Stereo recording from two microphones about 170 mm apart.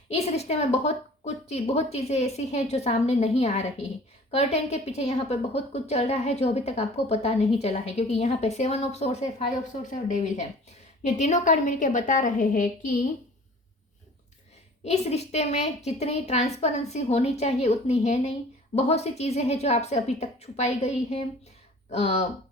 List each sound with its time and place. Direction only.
0.1 s a woman's voice: 40° left (ahead or behind)
14.8 s a woman's voice: 40° left (ahead or behind)